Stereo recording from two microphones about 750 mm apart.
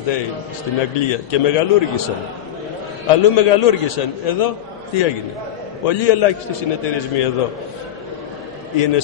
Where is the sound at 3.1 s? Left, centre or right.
Left.